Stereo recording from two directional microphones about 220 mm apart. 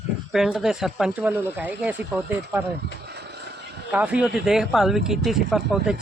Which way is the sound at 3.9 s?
5° right (ahead or behind).